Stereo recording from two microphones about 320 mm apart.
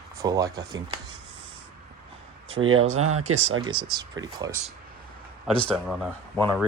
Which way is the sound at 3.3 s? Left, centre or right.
Right.